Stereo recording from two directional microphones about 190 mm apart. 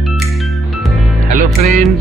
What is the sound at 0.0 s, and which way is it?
Music, centre (ahead or behind).